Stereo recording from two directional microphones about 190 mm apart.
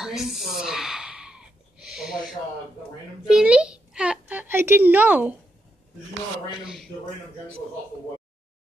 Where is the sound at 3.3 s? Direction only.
5° right (ahead or behind).